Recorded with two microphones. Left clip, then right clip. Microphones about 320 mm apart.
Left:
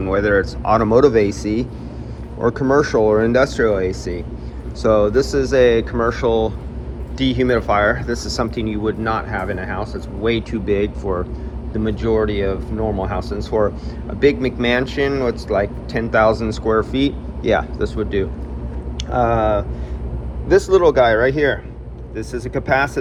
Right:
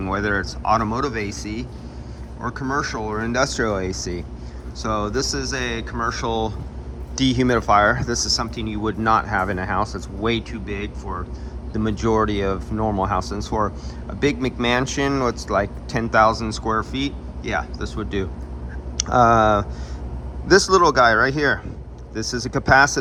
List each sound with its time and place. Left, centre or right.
0.0 s speech: centre
2.4 s speech: centre
10.5 s speech: centre
11.7 s speech: centre
19.3 s speech: centre